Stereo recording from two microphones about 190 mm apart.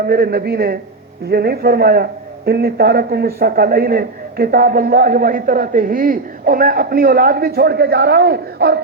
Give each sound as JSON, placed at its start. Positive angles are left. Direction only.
{"t": 0.1, "sound": "a man's voice", "side_deg": -55}